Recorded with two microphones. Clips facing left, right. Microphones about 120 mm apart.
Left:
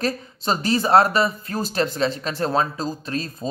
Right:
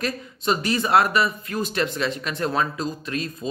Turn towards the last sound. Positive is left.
turn(degrees=35)  # may be behind; listen again after turning